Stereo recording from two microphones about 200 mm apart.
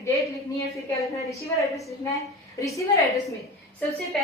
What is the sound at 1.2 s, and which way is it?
A woman's voice, 15° left (ahead or behind).